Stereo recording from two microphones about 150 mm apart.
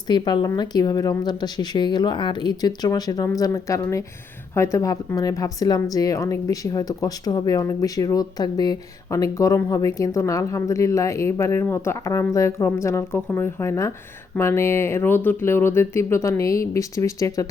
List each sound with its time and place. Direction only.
0.1 s a woman's voice: 30° left (ahead or behind)